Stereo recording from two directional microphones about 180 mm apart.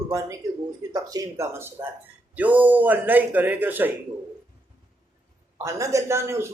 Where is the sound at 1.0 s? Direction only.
20° right (ahead or behind).